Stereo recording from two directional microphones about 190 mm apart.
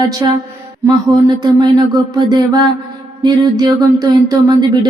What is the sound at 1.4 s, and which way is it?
Speech, 20° right (ahead or behind).